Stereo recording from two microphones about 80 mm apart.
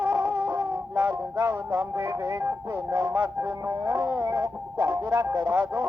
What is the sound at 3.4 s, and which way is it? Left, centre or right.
Music, right.